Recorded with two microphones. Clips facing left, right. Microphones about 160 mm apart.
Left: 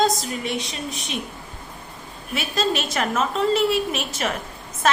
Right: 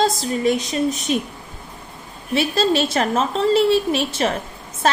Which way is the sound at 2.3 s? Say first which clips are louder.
Right 6 dB; 30° right (ahead or behind).